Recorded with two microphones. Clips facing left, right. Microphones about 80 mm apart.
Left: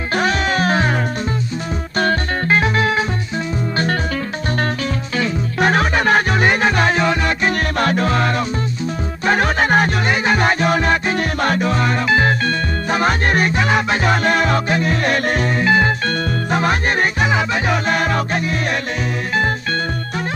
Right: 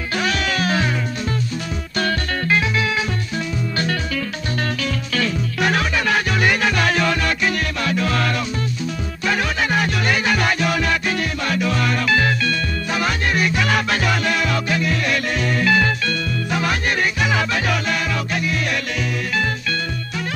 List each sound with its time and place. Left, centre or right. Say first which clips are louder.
0.1 s music: left 4 dB; left
2.0 s music: left 4 dB; left
5.6 s music: left 4 dB; left
7.8 s music: left 4 dB; left
8.1 s music: left 3 dB; left
9.2 s music: left 5 dB; left
10.0 s music: left 3 dB; left
13.7 s music: left 3 dB; left
15.5 s music: left 1 dB; left
16.1 s music: left 4 dB; left